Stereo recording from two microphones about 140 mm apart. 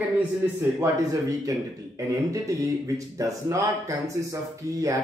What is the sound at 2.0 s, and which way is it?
Speech, 25° right (ahead or behind).